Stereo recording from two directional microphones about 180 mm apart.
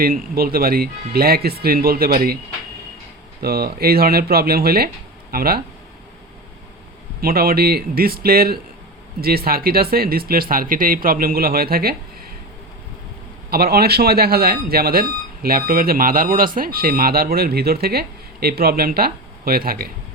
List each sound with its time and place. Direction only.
0.0 s speech: 55° right (ahead or behind)
3.4 s speech: 60° right (ahead or behind)
7.2 s speech: 55° right (ahead or behind)
13.5 s speech: 60° right (ahead or behind)